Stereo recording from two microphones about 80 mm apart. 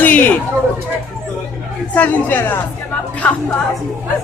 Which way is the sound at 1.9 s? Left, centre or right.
Left.